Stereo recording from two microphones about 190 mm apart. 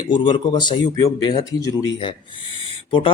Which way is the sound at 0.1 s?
25° left (ahead or behind).